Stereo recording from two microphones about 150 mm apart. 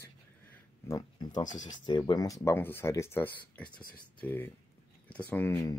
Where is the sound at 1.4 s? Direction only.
55° left (ahead or behind).